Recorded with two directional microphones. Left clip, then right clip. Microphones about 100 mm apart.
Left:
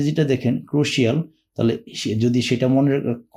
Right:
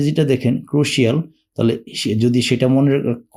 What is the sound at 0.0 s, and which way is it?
Speech, 40° right (ahead or behind).